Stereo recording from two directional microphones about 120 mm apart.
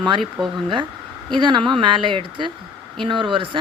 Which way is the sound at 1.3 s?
40° right (ahead or behind).